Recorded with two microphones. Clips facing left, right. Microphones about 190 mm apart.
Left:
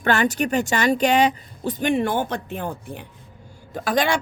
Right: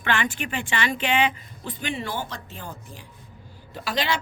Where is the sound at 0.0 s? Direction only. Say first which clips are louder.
Left 7 dB; 40° left (ahead or behind).